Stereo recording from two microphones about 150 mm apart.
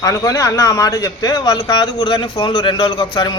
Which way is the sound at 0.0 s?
25° left (ahead or behind).